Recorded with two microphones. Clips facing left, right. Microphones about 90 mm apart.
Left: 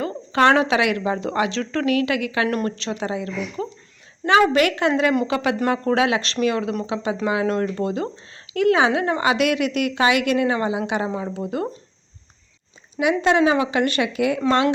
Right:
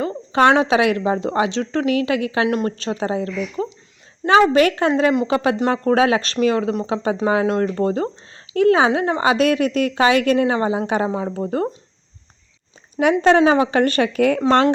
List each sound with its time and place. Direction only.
0.0 s speech: 25° right (ahead or behind)
2.7 s a woman's voice: 35° right (ahead or behind)
13.0 s a woman's voice: 45° right (ahead or behind)